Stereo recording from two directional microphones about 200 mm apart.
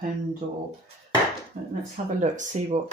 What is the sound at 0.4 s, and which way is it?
Speech, 40° right (ahead or behind).